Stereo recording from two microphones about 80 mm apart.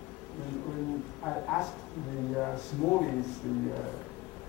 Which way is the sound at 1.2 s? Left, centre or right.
Centre.